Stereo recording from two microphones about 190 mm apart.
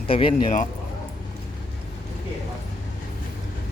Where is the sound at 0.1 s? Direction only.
30° left (ahead or behind).